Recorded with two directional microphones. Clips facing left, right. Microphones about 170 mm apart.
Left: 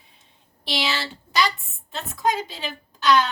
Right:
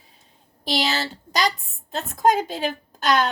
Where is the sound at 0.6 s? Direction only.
40° right (ahead or behind).